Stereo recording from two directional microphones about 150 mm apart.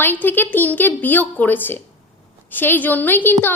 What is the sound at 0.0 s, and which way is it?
A woman's voice, 10° left (ahead or behind).